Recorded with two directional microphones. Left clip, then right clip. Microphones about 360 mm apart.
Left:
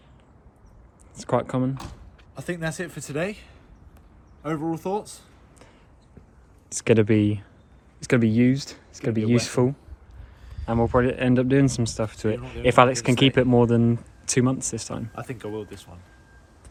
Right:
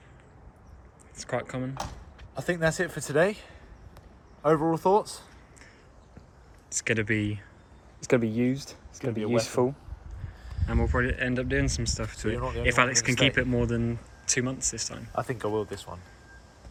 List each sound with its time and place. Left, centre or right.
1.3 s speech: centre
2.3 s a man's voice: centre
6.7 s speech: centre
8.0 s speech: left
10.7 s speech: centre
15.1 s a man's voice: centre